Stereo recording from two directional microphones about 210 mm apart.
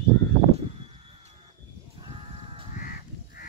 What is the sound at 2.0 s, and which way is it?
Crow, 25° right (ahead or behind).